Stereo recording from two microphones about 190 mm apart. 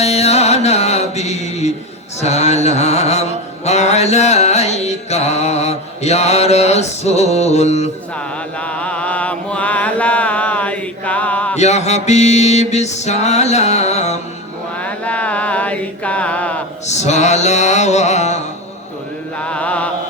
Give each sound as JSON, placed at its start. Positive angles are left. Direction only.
{"t": 0.0, "sound": "mantra", "side_deg": 35}
{"t": 2.2, "sound": "music", "side_deg": 35}
{"t": 8.6, "sound": "mantra", "side_deg": 5}
{"t": 11.5, "sound": "music", "side_deg": 35}
{"t": 14.8, "sound": "chant", "side_deg": 5}
{"t": 16.8, "sound": "music", "side_deg": 35}
{"t": 19.4, "sound": "mantra", "side_deg": 5}